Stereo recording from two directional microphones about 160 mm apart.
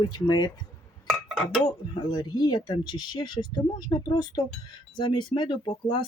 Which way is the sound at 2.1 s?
25° left (ahead or behind).